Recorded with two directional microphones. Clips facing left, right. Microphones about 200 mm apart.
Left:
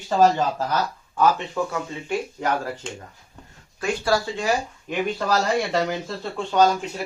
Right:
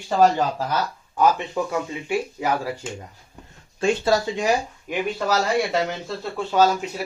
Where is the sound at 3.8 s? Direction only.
25° right (ahead or behind).